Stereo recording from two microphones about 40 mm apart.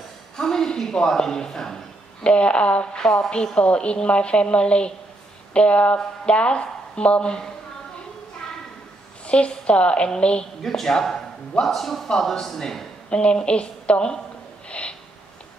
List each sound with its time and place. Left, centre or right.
0.4 s a sound: centre
1.0 s speech: centre
2.2 s a woman's voice: left
9.2 s a woman's voice: left
10.6 s speech: centre
13.1 s a woman's voice: left
14.7 s snort: left